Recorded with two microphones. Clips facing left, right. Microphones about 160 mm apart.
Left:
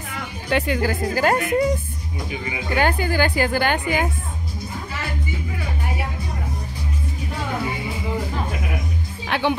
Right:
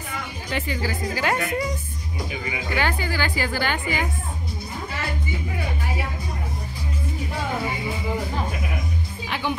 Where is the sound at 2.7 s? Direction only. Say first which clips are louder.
Left 5 dB; 50° left (ahead or behind).